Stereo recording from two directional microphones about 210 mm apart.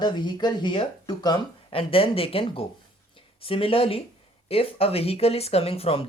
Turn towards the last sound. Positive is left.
turn(degrees=25)  # may be behind; listen again after turning